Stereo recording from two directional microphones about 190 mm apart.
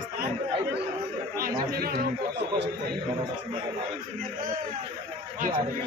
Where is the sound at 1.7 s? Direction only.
55° right (ahead or behind).